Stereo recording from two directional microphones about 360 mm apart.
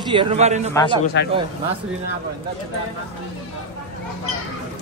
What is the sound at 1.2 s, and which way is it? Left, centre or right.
Speech, left.